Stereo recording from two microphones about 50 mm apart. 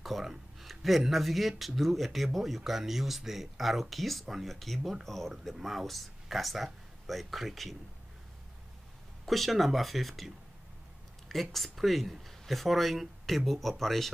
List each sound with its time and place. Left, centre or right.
0.0 s speech: centre
9.2 s speech: centre
11.5 s speech: centre